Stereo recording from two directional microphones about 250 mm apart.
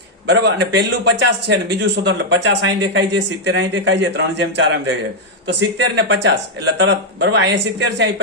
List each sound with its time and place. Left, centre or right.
0.3 s a man's voice: right